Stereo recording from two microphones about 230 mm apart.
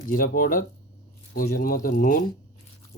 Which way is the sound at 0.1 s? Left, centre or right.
Left.